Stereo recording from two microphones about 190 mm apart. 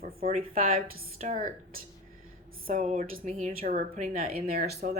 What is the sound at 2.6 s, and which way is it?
A woman's voice, 40° right (ahead or behind).